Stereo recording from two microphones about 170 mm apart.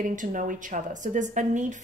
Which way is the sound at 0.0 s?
50° right (ahead or behind).